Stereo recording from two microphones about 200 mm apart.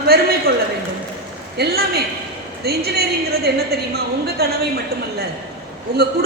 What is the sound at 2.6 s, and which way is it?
A woman's voice, 50° right (ahead or behind).